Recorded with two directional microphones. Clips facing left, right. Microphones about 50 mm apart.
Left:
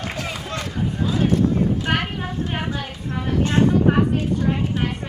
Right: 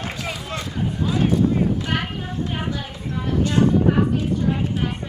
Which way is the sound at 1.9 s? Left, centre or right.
Left.